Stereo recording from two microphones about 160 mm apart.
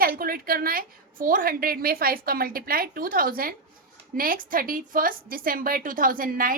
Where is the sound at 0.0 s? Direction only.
65° right (ahead or behind).